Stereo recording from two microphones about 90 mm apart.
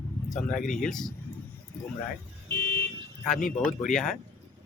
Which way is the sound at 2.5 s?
20° left (ahead or behind).